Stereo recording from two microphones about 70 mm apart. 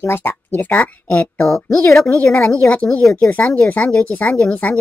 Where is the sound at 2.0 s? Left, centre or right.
Left.